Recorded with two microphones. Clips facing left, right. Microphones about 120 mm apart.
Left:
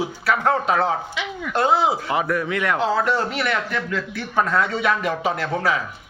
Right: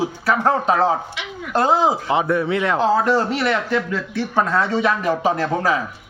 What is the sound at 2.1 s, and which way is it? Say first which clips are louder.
Speech: right 4 dB; 25° right (ahead or behind).